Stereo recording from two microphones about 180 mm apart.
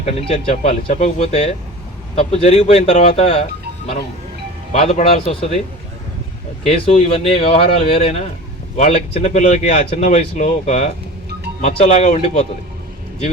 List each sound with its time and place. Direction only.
0.0 s speech: 35° left (ahead or behind)
4.7 s speech: 35° left (ahead or behind)
6.7 s speech: 35° left (ahead or behind)